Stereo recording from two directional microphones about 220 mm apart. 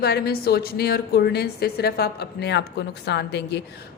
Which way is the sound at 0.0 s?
45° left (ahead or behind).